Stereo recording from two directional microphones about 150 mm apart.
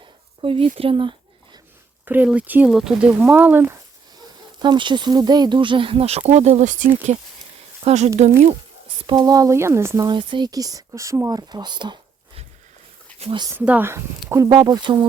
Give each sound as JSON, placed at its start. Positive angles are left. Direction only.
{"t": 0.4, "sound": "speech", "side_deg": -35}
{"t": 2.0, "sound": "speech", "side_deg": -10}
{"t": 4.6, "sound": "speech", "side_deg": -30}
{"t": 9.0, "sound": "speech", "side_deg": -25}
{"t": 10.2, "sound": "speech", "side_deg": -30}
{"t": 13.1, "sound": "a sound", "side_deg": -40}
{"t": 13.6, "sound": "speech", "side_deg": -10}
{"t": 14.3, "sound": "speech", "side_deg": -25}